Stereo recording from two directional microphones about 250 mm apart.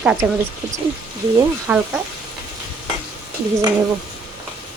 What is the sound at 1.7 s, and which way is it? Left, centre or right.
Speech, centre.